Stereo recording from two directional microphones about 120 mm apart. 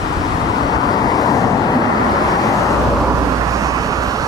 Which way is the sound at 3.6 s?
30° right (ahead or behind).